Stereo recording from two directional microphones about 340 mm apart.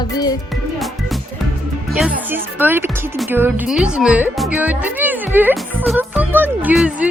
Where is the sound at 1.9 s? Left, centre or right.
Centre.